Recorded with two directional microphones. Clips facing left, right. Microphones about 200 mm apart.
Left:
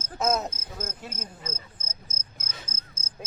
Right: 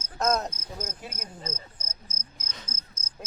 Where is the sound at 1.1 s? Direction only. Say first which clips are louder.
Even; 25° left (ahead or behind).